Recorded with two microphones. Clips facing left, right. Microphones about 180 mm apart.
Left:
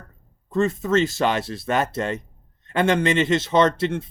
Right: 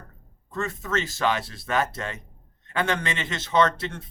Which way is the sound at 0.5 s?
30° left (ahead or behind).